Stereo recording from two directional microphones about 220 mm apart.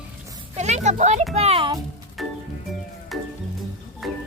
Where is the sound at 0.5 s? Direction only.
30° right (ahead or behind).